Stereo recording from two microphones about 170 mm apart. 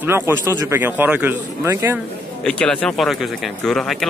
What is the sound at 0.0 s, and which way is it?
Speech, 15° right (ahead or behind).